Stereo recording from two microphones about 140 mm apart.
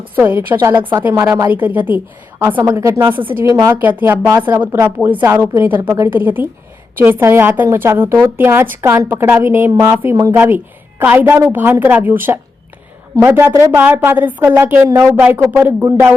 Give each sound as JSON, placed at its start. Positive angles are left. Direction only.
{"t": 0.2, "sound": "a woman's voice", "side_deg": -15}
{"t": 3.8, "sound": "a woman's voice", "side_deg": -15}